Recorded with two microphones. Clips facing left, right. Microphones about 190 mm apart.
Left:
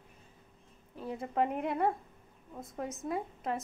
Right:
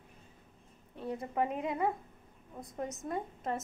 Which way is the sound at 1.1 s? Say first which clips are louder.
Left 2 dB; 20° left (ahead or behind).